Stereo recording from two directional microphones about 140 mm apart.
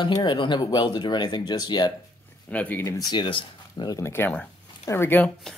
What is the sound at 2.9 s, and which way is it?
Speech, 35° left (ahead or behind).